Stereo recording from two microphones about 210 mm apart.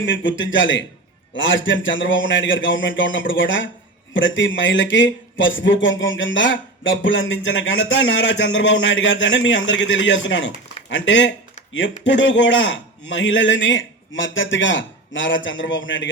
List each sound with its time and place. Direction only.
0.0 s a man's voice: 60° left (ahead or behind)